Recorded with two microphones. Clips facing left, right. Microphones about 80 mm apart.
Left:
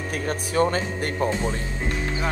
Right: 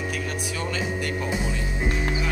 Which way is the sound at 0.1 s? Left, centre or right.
Left.